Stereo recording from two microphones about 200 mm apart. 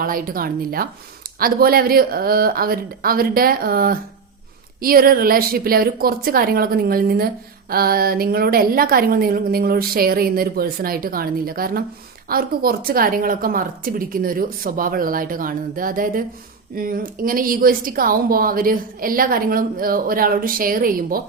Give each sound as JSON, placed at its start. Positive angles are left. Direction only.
{"t": 0.0, "sound": "a woman's voice", "side_deg": -45}